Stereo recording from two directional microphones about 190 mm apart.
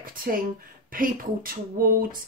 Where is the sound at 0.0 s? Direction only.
50° right (ahead or behind).